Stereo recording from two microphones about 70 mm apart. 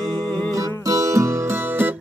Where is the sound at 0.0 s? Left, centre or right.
Centre.